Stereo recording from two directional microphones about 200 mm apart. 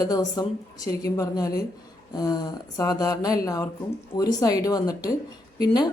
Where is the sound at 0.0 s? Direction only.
20° left (ahead or behind).